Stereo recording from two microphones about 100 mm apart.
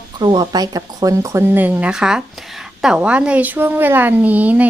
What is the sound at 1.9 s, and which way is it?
A woman's voice, 5° right (ahead or behind).